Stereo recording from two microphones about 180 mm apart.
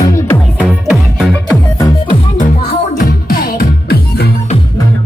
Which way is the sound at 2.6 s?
55° left (ahead or behind).